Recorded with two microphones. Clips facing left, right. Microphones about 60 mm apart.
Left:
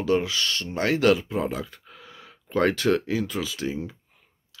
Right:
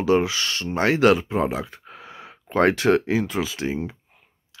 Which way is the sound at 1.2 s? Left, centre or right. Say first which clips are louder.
Right 4 dB; right.